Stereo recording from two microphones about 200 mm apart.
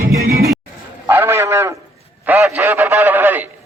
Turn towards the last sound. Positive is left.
turn(degrees=-10)  # may be behind; listen again after turning